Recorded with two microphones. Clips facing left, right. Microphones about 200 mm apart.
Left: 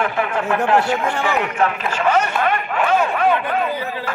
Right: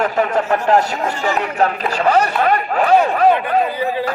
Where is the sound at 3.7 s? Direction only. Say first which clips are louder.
Right 5 dB; 15° right (ahead or behind).